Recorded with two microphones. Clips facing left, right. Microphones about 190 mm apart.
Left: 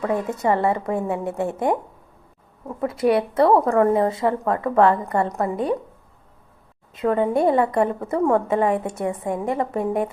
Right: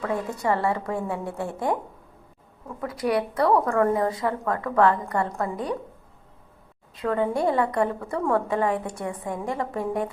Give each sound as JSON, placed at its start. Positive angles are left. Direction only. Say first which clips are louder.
{"t": 0.0, "sound": "a woman's voice", "louder": "left 4 dB", "side_deg": 20}
{"t": 7.0, "sound": "a woman's voice", "louder": "left 5 dB", "side_deg": 25}